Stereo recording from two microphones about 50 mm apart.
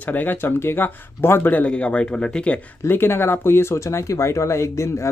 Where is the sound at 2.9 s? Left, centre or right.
Left.